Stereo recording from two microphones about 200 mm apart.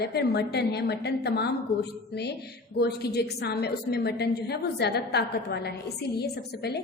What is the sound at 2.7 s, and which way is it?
A woman's voice, 55° left (ahead or behind).